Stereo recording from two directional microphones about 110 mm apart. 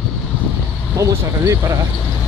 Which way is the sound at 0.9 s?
30° right (ahead or behind).